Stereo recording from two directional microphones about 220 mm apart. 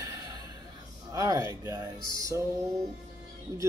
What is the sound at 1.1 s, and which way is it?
Speech, 15° right (ahead or behind).